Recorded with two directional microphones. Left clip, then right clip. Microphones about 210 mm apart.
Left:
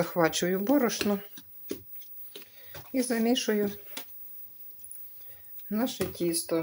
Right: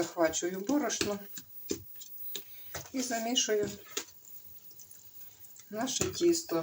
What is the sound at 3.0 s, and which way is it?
Speech, 55° left (ahead or behind).